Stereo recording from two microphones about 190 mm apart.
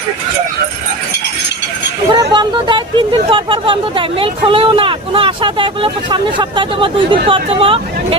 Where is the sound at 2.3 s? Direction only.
25° right (ahead or behind).